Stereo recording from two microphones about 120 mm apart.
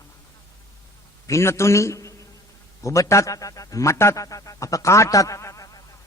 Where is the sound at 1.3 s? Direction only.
25° left (ahead or behind).